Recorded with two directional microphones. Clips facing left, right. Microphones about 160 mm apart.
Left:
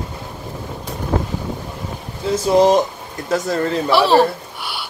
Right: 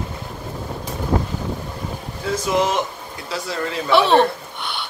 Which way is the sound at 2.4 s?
35° left (ahead or behind).